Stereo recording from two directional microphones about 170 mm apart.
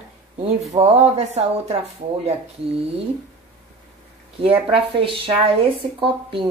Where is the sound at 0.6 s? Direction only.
40° right (ahead or behind).